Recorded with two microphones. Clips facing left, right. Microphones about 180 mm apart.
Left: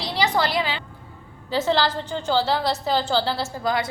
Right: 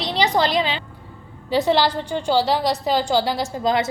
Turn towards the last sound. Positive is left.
turn(degrees=-20)  # may be behind; listen again after turning